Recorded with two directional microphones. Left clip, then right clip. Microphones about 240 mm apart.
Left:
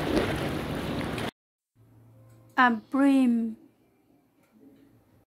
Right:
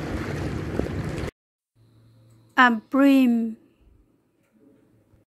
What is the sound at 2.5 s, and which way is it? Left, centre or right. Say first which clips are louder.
Speech: right 5 dB; centre.